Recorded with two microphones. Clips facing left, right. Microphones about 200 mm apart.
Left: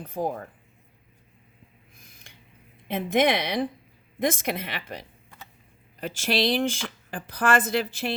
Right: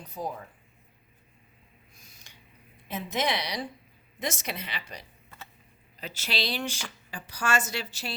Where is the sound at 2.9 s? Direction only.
55° left (ahead or behind).